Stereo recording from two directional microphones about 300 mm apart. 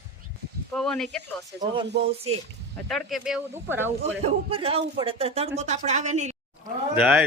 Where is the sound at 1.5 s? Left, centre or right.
Centre.